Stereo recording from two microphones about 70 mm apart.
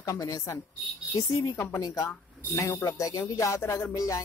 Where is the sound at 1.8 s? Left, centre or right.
Left.